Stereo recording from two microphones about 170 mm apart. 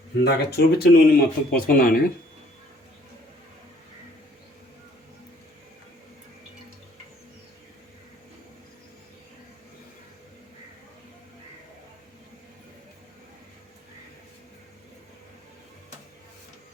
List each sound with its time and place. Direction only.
0.3 s speech: 70° left (ahead or behind)